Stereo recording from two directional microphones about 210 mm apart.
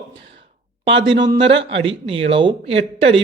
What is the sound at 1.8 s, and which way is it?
Speech, 25° right (ahead or behind).